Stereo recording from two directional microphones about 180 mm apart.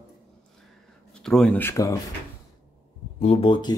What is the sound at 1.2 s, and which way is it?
Speech, 5° left (ahead or behind).